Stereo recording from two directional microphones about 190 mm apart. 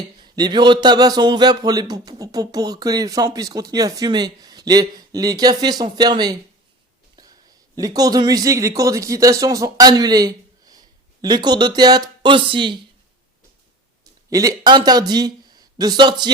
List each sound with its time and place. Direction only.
0.2 s speech: 20° right (ahead or behind)
7.8 s speech: 20° right (ahead or behind)
14.3 s speech: 20° right (ahead or behind)